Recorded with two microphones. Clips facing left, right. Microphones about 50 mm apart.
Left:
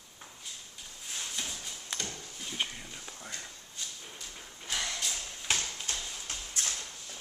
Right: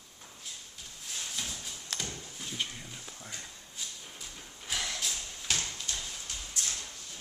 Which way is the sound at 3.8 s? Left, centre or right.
Centre.